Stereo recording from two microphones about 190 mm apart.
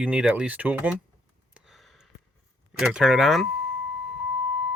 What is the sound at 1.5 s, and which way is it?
Sniff, centre (ahead or behind).